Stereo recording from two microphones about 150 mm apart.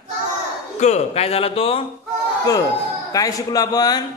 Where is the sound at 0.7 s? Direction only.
50° left (ahead or behind).